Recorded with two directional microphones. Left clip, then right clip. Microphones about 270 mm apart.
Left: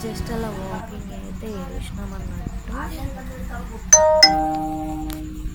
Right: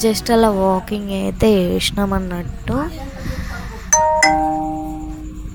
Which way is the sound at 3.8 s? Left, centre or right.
Centre.